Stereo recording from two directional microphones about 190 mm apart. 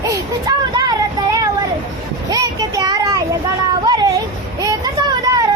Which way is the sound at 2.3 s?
20° right (ahead or behind).